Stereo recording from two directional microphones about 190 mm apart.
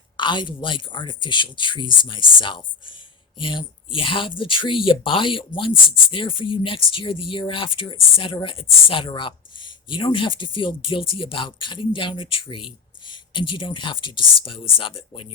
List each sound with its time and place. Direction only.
0.2 s speech: 25° left (ahead or behind)